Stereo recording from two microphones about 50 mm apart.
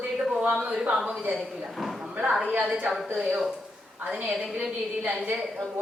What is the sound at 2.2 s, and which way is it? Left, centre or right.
Speech, centre.